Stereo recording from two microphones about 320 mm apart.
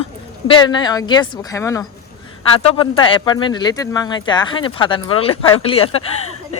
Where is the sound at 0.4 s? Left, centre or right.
Centre.